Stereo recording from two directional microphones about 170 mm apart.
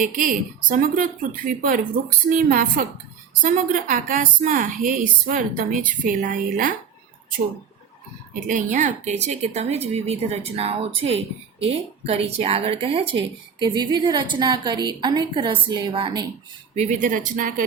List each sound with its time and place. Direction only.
0.0 s a woman's voice: 50° right (ahead or behind)
8.4 s a woman's voice: 50° right (ahead or behind); by 16.2 s 25° right (ahead or behind)
16.7 s a woman's voice: 45° right (ahead or behind)